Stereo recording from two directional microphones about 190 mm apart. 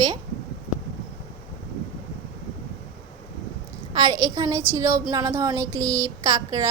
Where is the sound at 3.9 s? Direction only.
20° right (ahead or behind).